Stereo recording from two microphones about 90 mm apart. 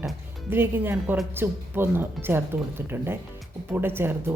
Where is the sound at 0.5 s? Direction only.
25° right (ahead or behind).